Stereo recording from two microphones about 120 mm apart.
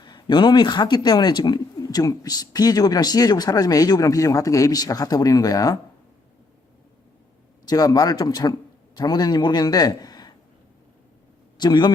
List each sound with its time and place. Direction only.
0.0 s speech: 35° left (ahead or behind)
7.7 s a man's voice: 30° left (ahead or behind)
11.5 s a man's voice: 35° left (ahead or behind)